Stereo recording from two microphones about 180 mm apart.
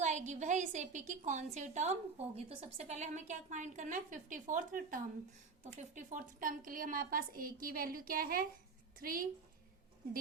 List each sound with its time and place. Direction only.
0.0 s a woman's voice: 40° right (ahead or behind)